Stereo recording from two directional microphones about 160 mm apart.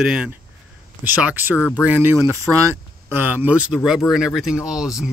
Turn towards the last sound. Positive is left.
turn(degrees=-5)  # may be behind; listen again after turning